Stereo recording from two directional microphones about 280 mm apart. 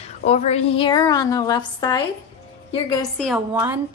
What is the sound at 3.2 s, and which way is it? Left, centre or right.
Speech, centre.